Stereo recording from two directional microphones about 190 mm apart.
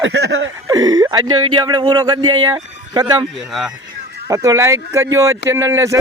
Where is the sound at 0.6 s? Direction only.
20° right (ahead or behind).